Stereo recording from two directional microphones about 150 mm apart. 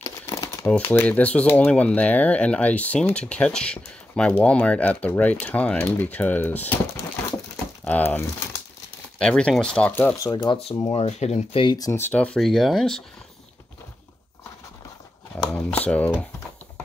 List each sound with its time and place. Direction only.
0.0 s crumpling: 20° left (ahead or behind)
0.7 s speech: 10° left (ahead or behind)
7.8 s speech: 10° left (ahead or behind)
10.2 s speech: 30° left (ahead or behind); by 11.6 s 45° left (ahead or behind)
11.6 s speech: 30° left (ahead or behind)
11.9 s speech: 15° left (ahead or behind)
15.5 s speech: 10° left (ahead or behind)